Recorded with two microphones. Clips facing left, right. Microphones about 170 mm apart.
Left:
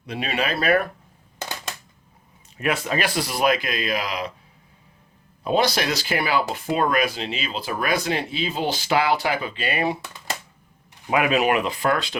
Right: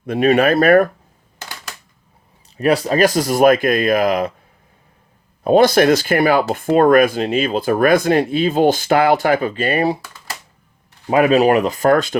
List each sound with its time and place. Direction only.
0.0 s speech: 50° right (ahead or behind)
2.6 s speech: 35° right (ahead or behind)
5.4 s speech: 50° right (ahead or behind)
11.1 s speech: 35° right (ahead or behind)